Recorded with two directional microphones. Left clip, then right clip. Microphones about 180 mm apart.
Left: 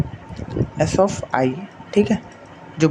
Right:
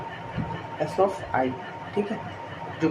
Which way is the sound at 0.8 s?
60° left (ahead or behind).